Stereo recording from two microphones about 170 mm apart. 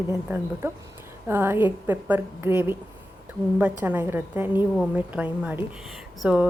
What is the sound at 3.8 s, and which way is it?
A woman's voice, 10° right (ahead or behind).